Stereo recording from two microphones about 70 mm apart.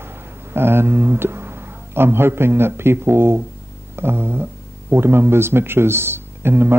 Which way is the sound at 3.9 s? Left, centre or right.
Right.